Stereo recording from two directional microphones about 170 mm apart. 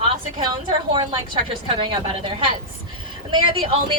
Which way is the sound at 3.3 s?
30° right (ahead or behind).